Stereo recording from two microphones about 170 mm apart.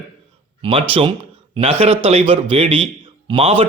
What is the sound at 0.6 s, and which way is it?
A man's voice, 30° right (ahead or behind).